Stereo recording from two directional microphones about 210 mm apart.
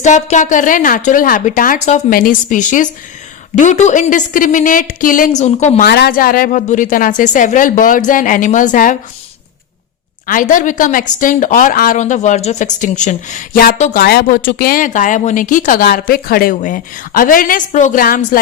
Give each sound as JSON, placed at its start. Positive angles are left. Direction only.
{"t": 0.0, "sound": "speech", "side_deg": 35}
{"t": 5.9, "sound": "speech", "side_deg": 45}
{"t": 10.2, "sound": "speech", "side_deg": 40}
{"t": 14.0, "sound": "speech", "side_deg": 45}